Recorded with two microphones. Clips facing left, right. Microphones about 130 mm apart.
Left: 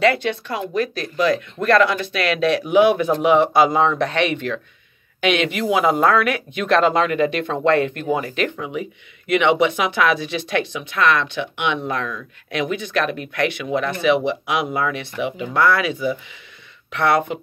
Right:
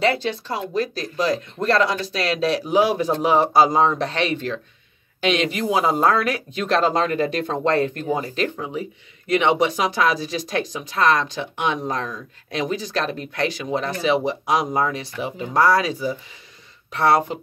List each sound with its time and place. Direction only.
0.0 s speech: 30° right (ahead or behind)